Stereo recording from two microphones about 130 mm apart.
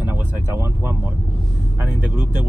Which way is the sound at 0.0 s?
15° right (ahead or behind).